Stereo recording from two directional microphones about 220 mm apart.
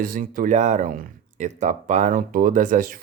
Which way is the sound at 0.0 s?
40° right (ahead or behind).